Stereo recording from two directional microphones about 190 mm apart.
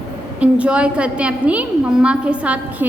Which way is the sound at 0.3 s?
5° right (ahead or behind).